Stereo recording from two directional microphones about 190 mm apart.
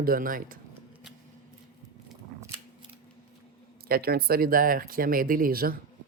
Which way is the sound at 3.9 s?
55° right (ahead or behind).